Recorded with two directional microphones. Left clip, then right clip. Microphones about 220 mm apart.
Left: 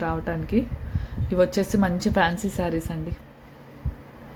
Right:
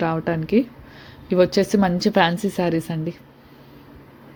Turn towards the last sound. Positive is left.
turn(degrees=-20)  # may be behind; listen again after turning